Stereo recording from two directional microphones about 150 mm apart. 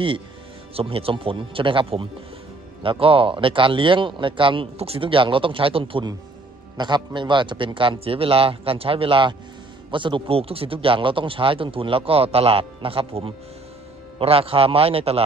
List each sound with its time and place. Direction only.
0.7 s speech: 40° right (ahead or behind)